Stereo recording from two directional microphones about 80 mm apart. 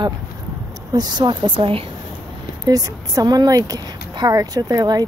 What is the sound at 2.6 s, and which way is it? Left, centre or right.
Speech, right.